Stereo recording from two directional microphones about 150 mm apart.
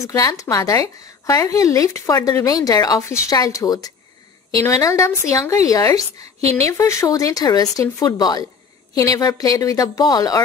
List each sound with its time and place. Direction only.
0.0 s a woman's voice: 25° left (ahead or behind)